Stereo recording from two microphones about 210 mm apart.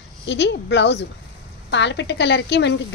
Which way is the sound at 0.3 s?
55° left (ahead or behind).